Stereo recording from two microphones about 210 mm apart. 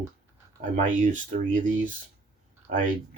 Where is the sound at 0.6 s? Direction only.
35° right (ahead or behind).